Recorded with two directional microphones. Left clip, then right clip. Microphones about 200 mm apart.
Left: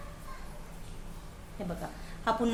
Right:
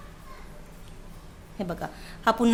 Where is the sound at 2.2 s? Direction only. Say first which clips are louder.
Right 7 dB; 45° right (ahead or behind).